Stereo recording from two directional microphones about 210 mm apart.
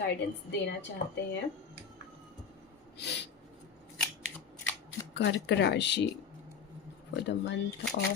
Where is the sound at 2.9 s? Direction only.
55° left (ahead or behind).